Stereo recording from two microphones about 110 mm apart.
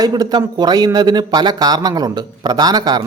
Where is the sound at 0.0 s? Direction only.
35° right (ahead or behind).